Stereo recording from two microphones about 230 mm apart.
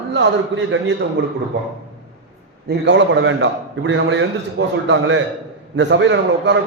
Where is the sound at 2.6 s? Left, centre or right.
Right.